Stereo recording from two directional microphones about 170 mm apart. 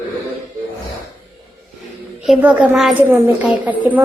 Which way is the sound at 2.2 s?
5° right (ahead or behind).